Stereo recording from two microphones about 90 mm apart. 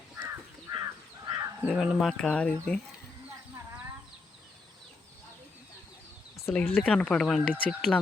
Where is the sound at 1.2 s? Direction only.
40° right (ahead or behind).